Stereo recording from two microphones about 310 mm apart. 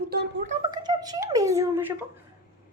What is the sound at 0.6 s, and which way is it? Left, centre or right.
Speech, centre.